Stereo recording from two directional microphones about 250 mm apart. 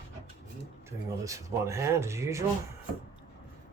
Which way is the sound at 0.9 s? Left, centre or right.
Centre.